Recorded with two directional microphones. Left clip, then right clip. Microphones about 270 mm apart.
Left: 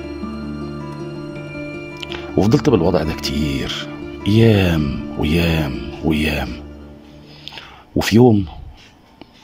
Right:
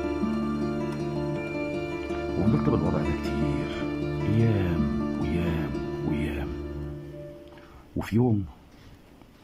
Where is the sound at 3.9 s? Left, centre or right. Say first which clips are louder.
Even; centre.